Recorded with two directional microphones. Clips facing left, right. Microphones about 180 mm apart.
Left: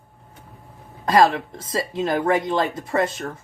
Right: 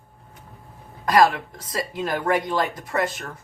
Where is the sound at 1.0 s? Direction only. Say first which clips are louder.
Left 1 dB; 25° left (ahead or behind).